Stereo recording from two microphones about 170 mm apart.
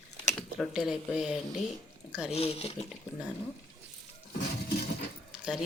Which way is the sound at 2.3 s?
35° left (ahead or behind).